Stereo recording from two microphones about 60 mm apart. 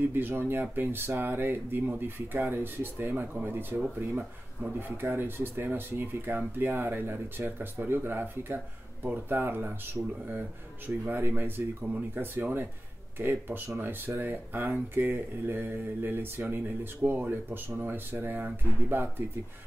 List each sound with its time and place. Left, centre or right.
0.1 s speech: right
10.0 s speech: right
11.1 s speech: right